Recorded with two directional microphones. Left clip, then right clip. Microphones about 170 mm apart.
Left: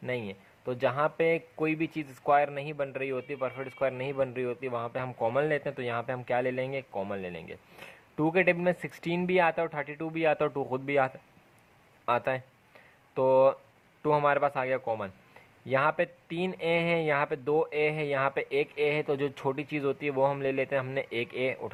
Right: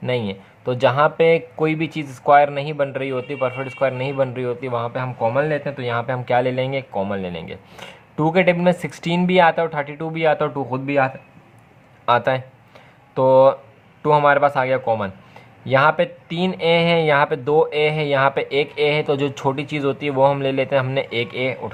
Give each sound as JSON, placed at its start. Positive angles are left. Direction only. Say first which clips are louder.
{"t": 0.0, "sound": "speech", "louder": "right 11 dB", "side_deg": 25}
{"t": 12.0, "sound": "speech", "louder": "right 11 dB", "side_deg": 30}